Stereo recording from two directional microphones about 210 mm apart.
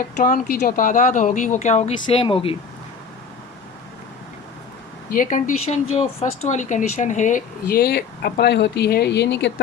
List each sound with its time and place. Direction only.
0.0 s speech: 40° left (ahead or behind)
5.1 s speech: 40° left (ahead or behind); by 9.5 s 55° left (ahead or behind)